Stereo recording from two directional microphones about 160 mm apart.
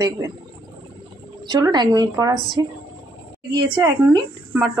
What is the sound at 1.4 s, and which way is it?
Speech, 25° right (ahead or behind).